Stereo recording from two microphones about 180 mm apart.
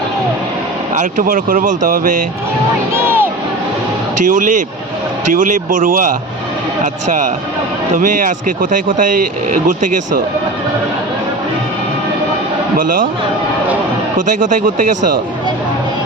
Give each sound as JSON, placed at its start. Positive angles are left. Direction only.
{"t": 0.9, "sound": "speech", "side_deg": -50}
{"t": 2.9, "sound": "speech", "side_deg": -15}
{"t": 4.3, "sound": "speech", "side_deg": -45}
{"t": 12.7, "sound": "speech", "side_deg": -50}
{"t": 14.2, "sound": "speech", "side_deg": -45}